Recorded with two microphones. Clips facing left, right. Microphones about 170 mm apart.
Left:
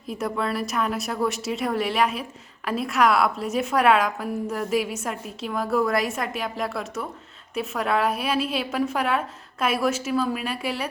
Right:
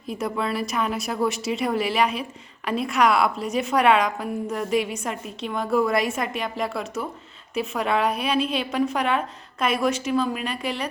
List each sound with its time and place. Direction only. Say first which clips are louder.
0.1 s a woman's voice: even; centre (ahead or behind)